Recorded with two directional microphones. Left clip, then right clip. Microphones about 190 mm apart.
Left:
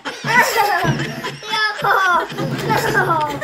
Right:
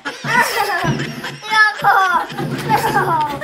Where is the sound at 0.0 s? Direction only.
Centre (ahead or behind).